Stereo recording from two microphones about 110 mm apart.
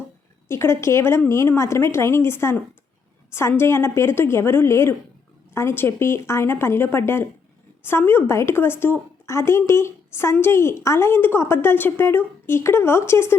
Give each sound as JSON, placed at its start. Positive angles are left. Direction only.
{"t": 0.4, "sound": "a woman's voice", "side_deg": 25}